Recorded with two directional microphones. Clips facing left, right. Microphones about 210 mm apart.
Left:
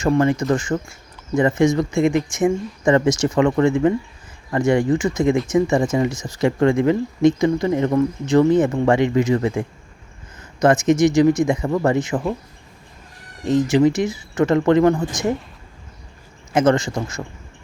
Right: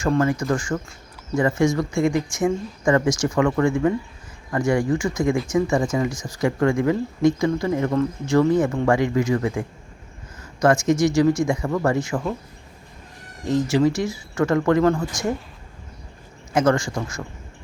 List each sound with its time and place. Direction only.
0.0 s speech: 20° left (ahead or behind)
13.4 s speech: 20° left (ahead or behind)
16.5 s speech: 20° left (ahead or behind)